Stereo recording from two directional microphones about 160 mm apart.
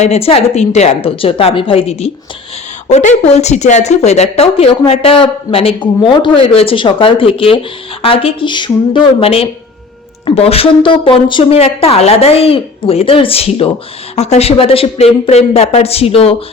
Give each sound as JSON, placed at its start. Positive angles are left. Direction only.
{"t": 0.0, "sound": "a woman's voice", "side_deg": 40}